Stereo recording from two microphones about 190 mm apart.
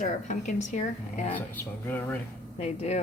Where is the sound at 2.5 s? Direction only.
35° left (ahead or behind).